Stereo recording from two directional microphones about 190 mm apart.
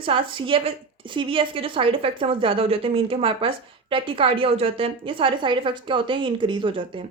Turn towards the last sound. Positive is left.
turn(degrees=-25)  # may be behind; listen again after turning